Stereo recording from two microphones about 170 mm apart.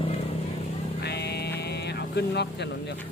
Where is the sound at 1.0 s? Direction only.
75° left (ahead or behind).